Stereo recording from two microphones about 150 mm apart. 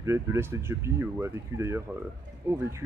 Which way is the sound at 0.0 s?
20° right (ahead or behind).